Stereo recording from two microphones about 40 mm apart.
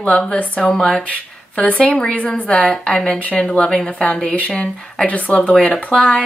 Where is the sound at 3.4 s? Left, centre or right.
Left.